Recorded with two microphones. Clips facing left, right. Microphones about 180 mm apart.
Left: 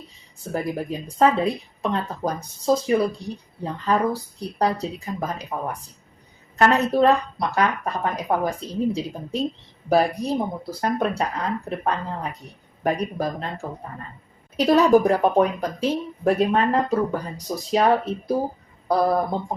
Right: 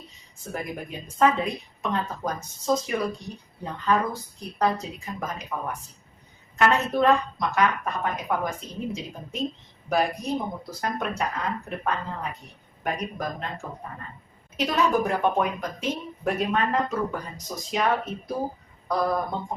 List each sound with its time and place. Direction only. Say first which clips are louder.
0.5 s speech: left 7 dB; 35° left (ahead or behind)
12.8 s speech: left 6 dB; 35° left (ahead or behind)